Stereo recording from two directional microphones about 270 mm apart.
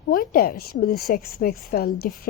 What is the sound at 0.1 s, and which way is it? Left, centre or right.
A woman's voice, left.